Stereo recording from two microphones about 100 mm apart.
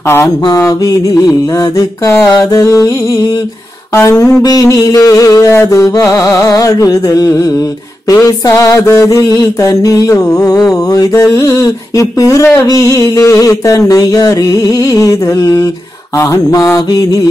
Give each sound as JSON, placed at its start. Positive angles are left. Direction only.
{"t": 0.1, "sound": "mantra", "side_deg": 30}
{"t": 3.9, "sound": "a sound", "side_deg": 30}
{"t": 4.4, "sound": "mantra", "side_deg": 40}